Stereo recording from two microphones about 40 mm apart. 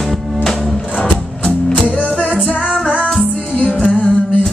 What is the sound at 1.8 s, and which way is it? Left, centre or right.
Music, left.